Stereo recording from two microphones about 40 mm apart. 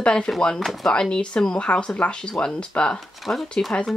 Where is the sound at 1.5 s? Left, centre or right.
Left.